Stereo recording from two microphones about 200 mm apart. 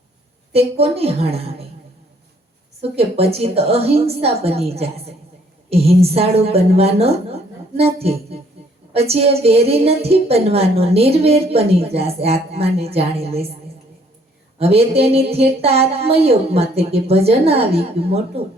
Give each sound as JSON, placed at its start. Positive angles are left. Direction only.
{"t": 0.5, "sound": "a woman's voice", "side_deg": -30}
{"t": 2.8, "sound": "a woman's voice", "side_deg": -30}
{"t": 14.6, "sound": "a woman's voice", "side_deg": -30}